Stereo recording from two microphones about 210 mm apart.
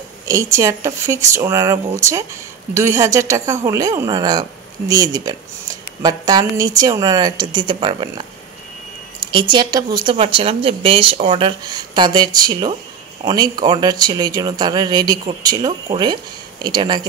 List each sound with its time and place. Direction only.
0.3 s a woman's voice: 15° right (ahead or behind)
9.2 s speech: 20° right (ahead or behind)